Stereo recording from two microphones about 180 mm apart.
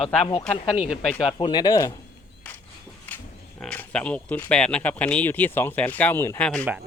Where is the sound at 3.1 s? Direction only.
5° left (ahead or behind).